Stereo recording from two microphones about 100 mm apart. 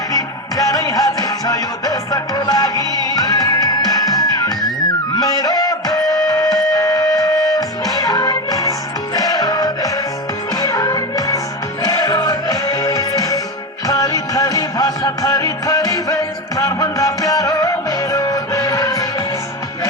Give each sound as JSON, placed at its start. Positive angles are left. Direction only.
{"t": 0.1, "sound": "music", "side_deg": 35}
{"t": 5.1, "sound": "music", "side_deg": 40}